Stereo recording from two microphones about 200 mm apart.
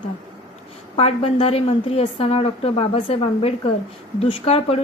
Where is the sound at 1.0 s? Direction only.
30° left (ahead or behind).